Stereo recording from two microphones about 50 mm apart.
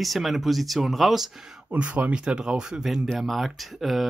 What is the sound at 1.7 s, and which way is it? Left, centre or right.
Speech, right.